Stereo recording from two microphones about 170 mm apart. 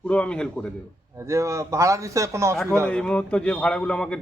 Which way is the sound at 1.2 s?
15° right (ahead or behind).